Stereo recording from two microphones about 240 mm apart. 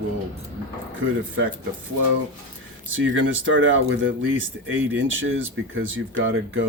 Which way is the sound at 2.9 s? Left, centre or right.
Right.